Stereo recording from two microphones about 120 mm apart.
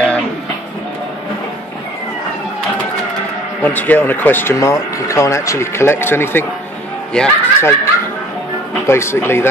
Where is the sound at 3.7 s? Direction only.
15° left (ahead or behind).